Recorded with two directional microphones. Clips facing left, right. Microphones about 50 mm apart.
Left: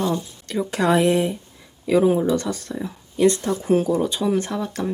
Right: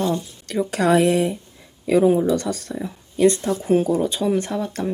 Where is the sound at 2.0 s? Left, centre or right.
Centre.